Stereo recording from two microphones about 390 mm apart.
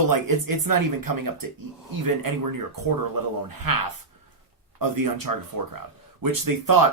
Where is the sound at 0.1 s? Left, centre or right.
Right.